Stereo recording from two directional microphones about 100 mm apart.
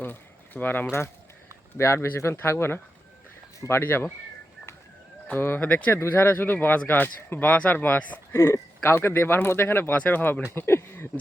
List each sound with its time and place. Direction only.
0.0 s a sound: 20° left (ahead or behind)
1.8 s a man's voice: 25° left (ahead or behind)
5.3 s a man's voice: 20° left (ahead or behind)